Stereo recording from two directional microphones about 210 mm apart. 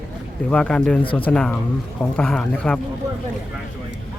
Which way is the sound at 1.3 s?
5° left (ahead or behind).